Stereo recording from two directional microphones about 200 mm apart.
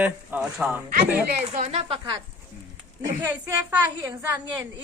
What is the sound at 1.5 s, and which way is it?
Speech, 30° right (ahead or behind).